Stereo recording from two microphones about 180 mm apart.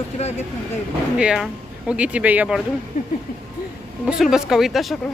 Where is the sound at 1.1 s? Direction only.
5° right (ahead or behind).